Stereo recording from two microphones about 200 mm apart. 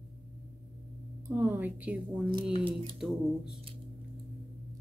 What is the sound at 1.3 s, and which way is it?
A woman's voice, 10° right (ahead or behind).